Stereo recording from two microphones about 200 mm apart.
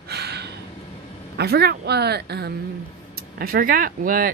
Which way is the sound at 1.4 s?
55° right (ahead or behind).